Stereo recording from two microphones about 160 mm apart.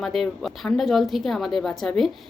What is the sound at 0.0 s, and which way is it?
A woman's voice, centre (ahead or behind).